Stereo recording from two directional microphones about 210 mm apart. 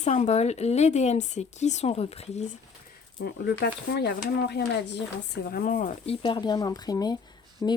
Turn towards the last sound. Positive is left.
turn(degrees=20)  # may be behind; listen again after turning